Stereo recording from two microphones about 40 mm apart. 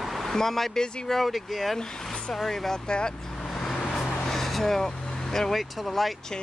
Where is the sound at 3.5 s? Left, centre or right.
Centre.